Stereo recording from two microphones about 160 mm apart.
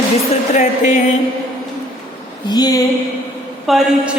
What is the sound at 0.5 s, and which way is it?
Speech, 50° left (ahead or behind).